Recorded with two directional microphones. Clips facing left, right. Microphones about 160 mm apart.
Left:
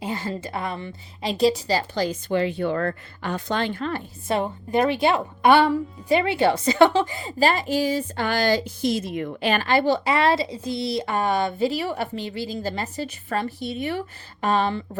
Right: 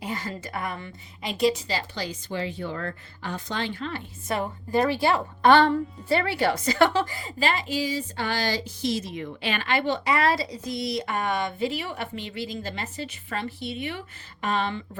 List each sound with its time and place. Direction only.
0.0 s a woman's voice: 25° left (ahead or behind); by 4.0 s 50° left (ahead or behind)
4.3 s a woman's voice: 25° left (ahead or behind)
7.3 s a woman's voice: 40° left (ahead or behind)